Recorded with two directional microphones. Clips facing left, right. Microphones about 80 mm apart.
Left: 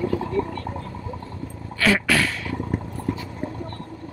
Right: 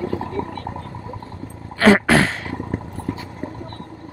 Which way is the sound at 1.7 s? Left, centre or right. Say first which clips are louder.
Right 7 dB; right.